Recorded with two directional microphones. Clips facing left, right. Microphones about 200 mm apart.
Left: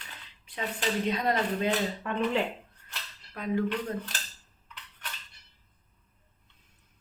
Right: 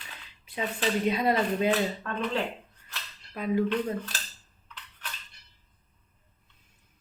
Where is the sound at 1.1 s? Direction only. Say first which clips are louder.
Right 3 dB; 10° right (ahead or behind).